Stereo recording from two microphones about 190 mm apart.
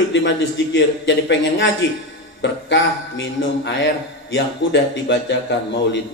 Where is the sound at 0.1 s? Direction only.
75° left (ahead or behind).